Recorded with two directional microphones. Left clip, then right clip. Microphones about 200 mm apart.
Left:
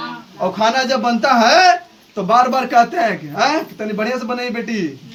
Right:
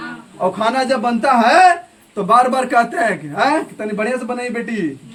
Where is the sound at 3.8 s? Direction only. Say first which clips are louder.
Right 1 dB; centre (ahead or behind).